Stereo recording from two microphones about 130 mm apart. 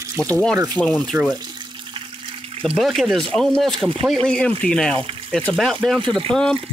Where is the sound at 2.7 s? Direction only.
Centre (ahead or behind).